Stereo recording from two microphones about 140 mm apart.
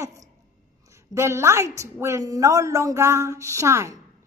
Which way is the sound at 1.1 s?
20° right (ahead or behind).